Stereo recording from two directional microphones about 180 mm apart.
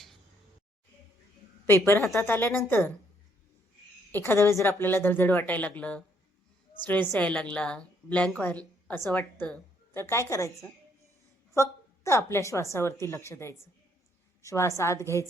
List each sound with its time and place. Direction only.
1.6 s a woman's voice: 15° left (ahead or behind)
4.1 s a woman's voice: 10° left (ahead or behind)